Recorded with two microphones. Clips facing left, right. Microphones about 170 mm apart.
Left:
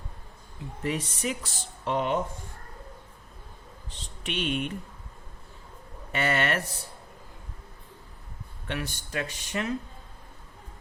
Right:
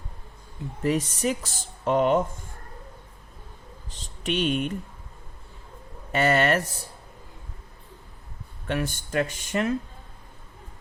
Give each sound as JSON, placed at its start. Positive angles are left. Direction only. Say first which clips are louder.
{"t": 0.9, "sound": "speech", "louder": "right 6 dB", "side_deg": -40}
{"t": 3.8, "sound": "speech", "louder": "right 7 dB", "side_deg": -40}
{"t": 6.1, "sound": "speech", "louder": "right 6 dB", "side_deg": -40}
{"t": 8.6, "sound": "speech", "louder": "right 6 dB", "side_deg": -45}